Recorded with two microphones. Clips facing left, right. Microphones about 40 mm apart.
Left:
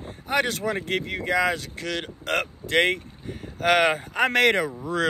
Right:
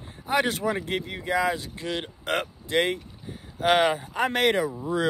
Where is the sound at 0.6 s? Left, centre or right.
Left.